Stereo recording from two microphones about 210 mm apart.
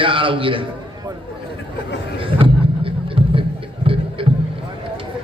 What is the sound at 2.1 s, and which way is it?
Music, 25° right (ahead or behind).